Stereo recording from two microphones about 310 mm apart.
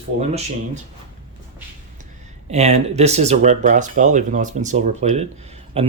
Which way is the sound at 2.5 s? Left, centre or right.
Right.